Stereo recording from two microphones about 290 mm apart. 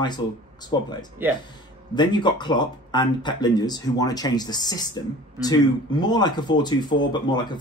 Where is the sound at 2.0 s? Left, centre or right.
Centre.